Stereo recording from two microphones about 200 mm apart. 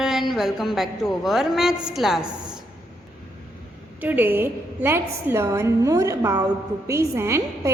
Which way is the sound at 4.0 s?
10° right (ahead or behind).